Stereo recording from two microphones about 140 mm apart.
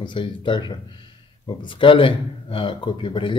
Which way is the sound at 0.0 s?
35° left (ahead or behind).